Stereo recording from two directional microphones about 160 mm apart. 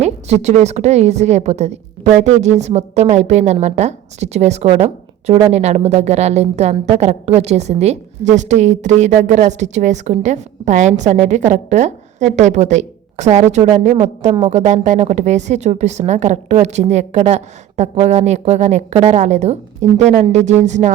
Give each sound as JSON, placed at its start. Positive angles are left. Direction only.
{"t": 0.0, "sound": "a woman's voice", "side_deg": -45}